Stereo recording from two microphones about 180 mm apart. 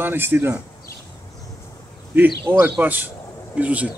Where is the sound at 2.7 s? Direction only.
10° right (ahead or behind).